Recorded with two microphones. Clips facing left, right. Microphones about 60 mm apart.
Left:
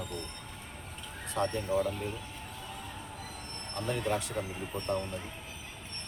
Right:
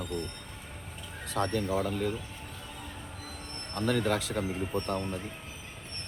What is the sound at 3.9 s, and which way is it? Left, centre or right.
Speech, right.